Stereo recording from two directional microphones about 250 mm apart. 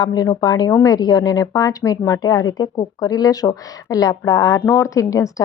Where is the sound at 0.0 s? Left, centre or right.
Centre.